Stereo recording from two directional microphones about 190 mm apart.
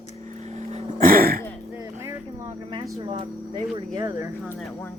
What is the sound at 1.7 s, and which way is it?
Vehicle, 15° right (ahead or behind).